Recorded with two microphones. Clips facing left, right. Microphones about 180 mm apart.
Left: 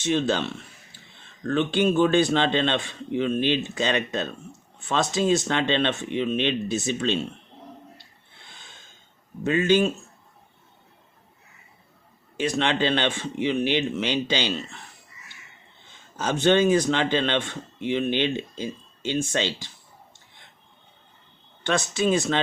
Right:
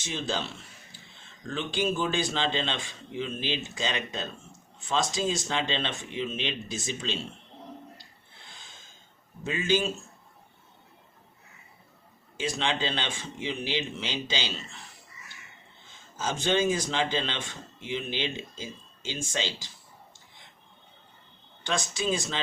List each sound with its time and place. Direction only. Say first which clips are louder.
0.0 s speech: left 9 dB; 60° left (ahead or behind)
9.4 s speech: left 7 dB; 60° left (ahead or behind)
12.4 s speech: left 6 dB; 60° left (ahead or behind)
16.1 s speech: left 7 dB; 65° left (ahead or behind)
21.6 s speech: left 7 dB; 65° left (ahead or behind)